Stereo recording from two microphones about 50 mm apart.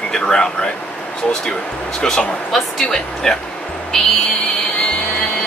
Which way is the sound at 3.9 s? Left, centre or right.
Centre.